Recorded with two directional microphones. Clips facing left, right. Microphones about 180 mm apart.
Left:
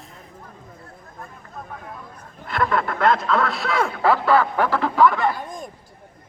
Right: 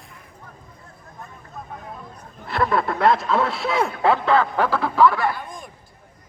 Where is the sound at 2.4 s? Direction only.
30° right (ahead or behind).